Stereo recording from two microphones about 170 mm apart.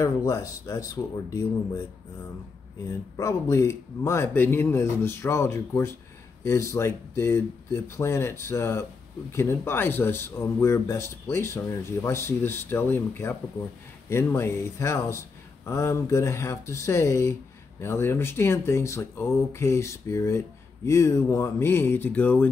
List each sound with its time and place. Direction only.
0.0 s speech: 20° left (ahead or behind)
3.2 s speech: 20° left (ahead or behind)